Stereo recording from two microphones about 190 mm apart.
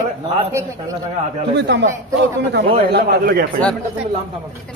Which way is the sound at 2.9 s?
55° right (ahead or behind).